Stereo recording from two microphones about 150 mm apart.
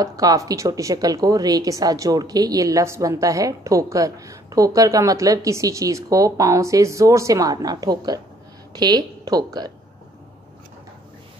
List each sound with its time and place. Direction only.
0.0 s a woman's voice: 25° right (ahead or behind)